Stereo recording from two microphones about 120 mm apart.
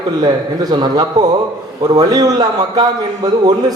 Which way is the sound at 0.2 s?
35° right (ahead or behind).